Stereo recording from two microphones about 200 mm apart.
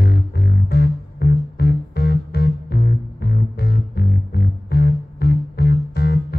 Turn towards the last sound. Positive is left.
turn(degrees=55)  # may be behind; listen again after turning